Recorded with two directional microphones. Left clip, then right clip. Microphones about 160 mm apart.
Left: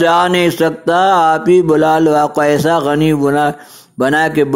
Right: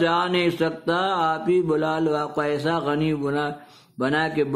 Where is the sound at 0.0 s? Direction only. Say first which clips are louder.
Left 10 dB; 40° left (ahead or behind).